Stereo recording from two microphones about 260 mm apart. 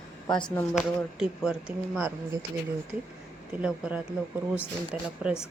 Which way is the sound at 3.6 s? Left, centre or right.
Centre.